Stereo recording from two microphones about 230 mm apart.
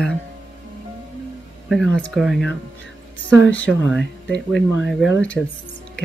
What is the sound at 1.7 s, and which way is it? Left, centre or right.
Speech, centre.